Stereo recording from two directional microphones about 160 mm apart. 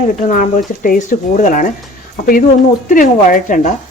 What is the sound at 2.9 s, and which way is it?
Speech, 55° left (ahead or behind).